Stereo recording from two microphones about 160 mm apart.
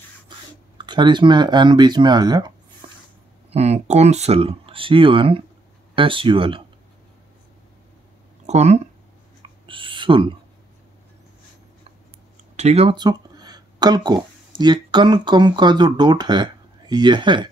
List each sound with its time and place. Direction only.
0.7 s speech: 30° right (ahead or behind)
3.5 s speech: 45° right (ahead or behind)
8.5 s speech: 45° right (ahead or behind)
9.4 s a sound: 30° right (ahead or behind)
12.5 s speech: 40° right (ahead or behind)
12.9 s speech: 25° right (ahead or behind)